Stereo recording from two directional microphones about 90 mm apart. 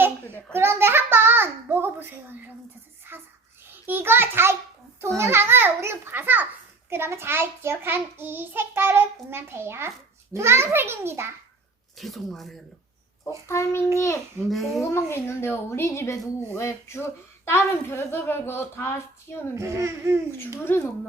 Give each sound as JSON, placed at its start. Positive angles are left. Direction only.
{"t": 0.3, "sound": "a woman's voice", "side_deg": 20}
{"t": 0.5, "sound": "a child's voice", "side_deg": -25}
{"t": 3.1, "sound": "a sound", "side_deg": -25}
{"t": 3.8, "sound": "a child's voice", "side_deg": -25}
{"t": 11.9, "sound": "speech", "side_deg": 0}
{"t": 13.2, "sound": "a child's voice", "side_deg": 30}
{"t": 19.5, "sound": "speech", "side_deg": -35}
{"t": 20.4, "sound": "a woman's voice", "side_deg": 25}